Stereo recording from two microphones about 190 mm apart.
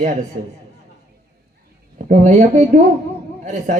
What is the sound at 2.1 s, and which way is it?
Speech, 40° right (ahead or behind).